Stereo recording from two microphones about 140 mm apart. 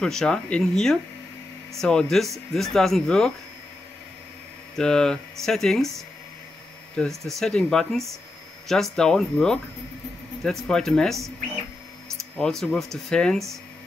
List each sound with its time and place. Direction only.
0.0 s speech: 5° left (ahead or behind)
4.7 s speech: 5° left (ahead or behind)
12.4 s speech: 5° left (ahead or behind)